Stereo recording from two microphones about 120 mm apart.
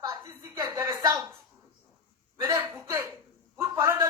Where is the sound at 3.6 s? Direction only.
25° right (ahead or behind).